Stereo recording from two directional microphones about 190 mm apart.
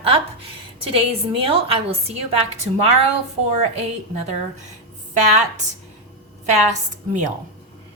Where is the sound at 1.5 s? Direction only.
30° right (ahead or behind).